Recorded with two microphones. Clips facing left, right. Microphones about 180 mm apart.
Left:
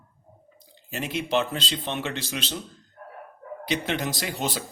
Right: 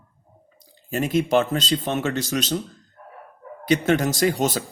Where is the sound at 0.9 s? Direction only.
45° right (ahead or behind).